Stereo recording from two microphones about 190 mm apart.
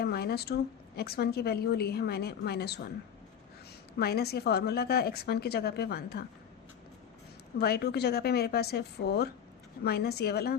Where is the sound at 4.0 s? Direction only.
55° left (ahead or behind).